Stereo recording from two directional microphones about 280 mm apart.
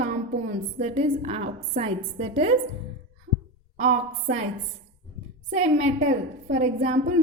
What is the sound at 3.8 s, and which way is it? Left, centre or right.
Speech, right.